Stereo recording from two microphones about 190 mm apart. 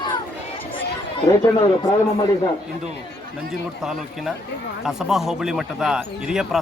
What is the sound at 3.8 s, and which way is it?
Speech, centre (ahead or behind).